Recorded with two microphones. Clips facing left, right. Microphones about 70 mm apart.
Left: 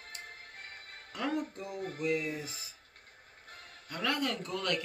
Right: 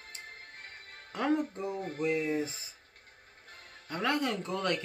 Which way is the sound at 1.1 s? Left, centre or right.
Right.